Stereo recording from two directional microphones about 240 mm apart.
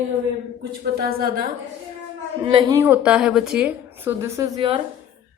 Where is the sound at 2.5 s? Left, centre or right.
Centre.